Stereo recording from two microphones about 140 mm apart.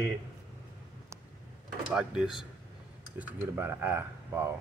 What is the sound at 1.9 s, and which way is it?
Speech, 5° right (ahead or behind).